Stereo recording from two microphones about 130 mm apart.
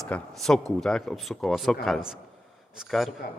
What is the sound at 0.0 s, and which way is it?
Speech, 5° left (ahead or behind).